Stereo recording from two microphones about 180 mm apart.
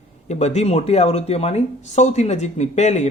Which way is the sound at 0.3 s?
40° left (ahead or behind).